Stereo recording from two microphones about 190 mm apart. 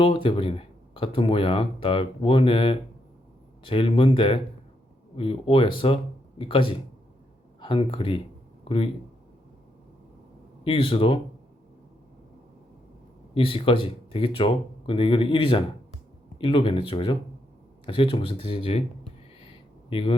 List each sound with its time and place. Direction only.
0.0 s speech: 25° left (ahead or behind)
10.6 s speech: 30° left (ahead or behind)
13.3 s speech: 30° left (ahead or behind)
19.9 s speech: 30° left (ahead or behind)